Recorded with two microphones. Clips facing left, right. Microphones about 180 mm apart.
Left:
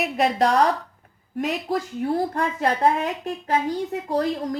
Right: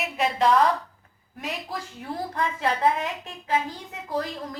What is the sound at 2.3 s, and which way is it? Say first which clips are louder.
A woman's voice: left 3 dB; 50° left (ahead or behind).